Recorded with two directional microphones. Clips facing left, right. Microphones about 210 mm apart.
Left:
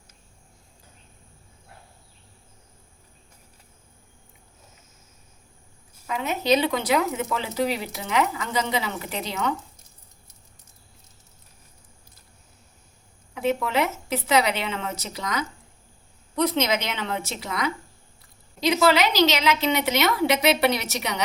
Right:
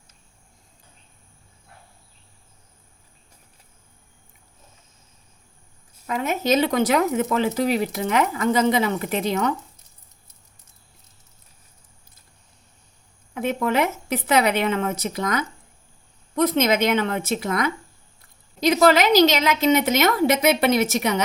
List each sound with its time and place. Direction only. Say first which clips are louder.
6.1 s speech: right 1 dB; 45° right (ahead or behind)
13.3 s speech: right 2 dB; 50° right (ahead or behind)